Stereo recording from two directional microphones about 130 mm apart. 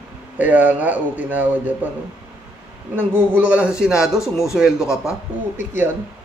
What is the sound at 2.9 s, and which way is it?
A man's voice, 15° right (ahead or behind).